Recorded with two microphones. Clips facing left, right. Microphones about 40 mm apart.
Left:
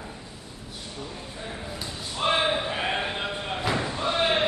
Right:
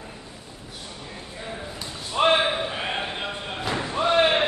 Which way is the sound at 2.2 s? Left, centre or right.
Right.